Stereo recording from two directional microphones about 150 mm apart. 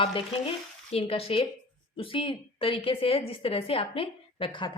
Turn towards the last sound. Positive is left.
turn(degrees=35)  # may be behind; listen again after turning